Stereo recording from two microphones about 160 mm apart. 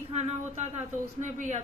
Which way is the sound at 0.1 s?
45° right (ahead or behind).